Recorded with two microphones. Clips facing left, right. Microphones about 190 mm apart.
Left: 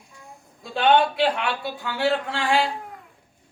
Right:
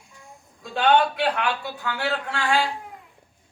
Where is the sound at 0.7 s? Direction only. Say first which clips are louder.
Left 1 dB; 20° left (ahead or behind).